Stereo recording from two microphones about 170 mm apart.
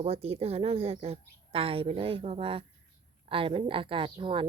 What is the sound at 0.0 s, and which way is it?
A woman's voice, 35° right (ahead or behind).